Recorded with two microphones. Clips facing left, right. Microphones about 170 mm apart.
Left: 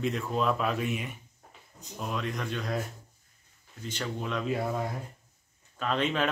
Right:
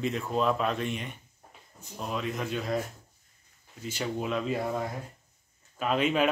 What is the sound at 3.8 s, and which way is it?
Speech, 10° right (ahead or behind).